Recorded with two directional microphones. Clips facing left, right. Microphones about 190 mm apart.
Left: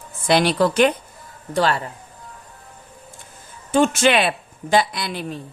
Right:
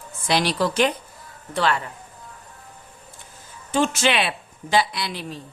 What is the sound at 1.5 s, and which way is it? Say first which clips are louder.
Speech: left 3 dB; 35° left (ahead or behind).